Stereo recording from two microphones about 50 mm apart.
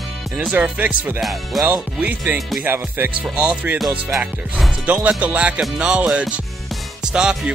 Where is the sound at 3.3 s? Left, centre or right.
Right.